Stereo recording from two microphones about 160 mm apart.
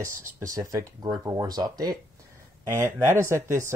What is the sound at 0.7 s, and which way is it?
Speech, 20° right (ahead or behind).